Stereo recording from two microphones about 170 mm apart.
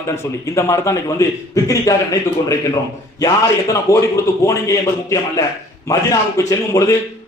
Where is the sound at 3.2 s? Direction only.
20° left (ahead or behind).